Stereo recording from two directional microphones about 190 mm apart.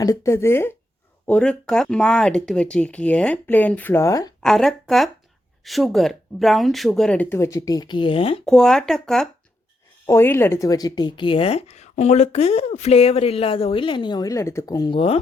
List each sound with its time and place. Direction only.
0.0 s speech: 15° left (ahead or behind)
4.4 s speech: centre (ahead or behind); by 8.4 s 30° left (ahead or behind)
8.4 s speech: 5° left (ahead or behind)
10.1 s speech: 15° left (ahead or behind); by 15.2 s 30° left (ahead or behind)